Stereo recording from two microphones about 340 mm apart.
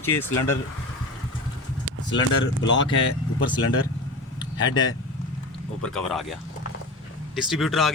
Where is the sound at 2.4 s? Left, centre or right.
Left.